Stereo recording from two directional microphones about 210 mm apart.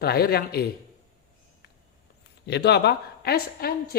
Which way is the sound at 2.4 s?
55° left (ahead or behind).